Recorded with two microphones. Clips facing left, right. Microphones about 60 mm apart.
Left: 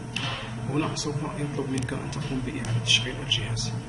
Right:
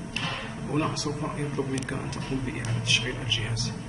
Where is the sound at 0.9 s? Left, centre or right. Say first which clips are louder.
Even; right.